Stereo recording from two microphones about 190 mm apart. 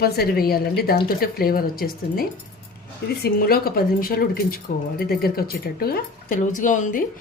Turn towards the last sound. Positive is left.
turn(degrees=40)  # may be behind; listen again after turning